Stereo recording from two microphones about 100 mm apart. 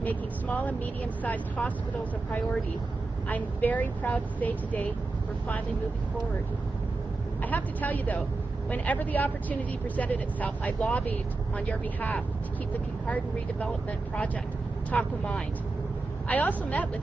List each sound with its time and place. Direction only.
0.0 s speech: 15° left (ahead or behind)
3.3 s speech: 15° left (ahead or behind)
7.4 s speech: 15° left (ahead or behind)
14.9 s speech: 15° left (ahead or behind)